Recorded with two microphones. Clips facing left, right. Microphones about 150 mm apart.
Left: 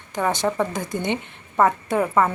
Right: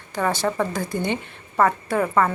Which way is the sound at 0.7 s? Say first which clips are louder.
Even; 20° left (ahead or behind).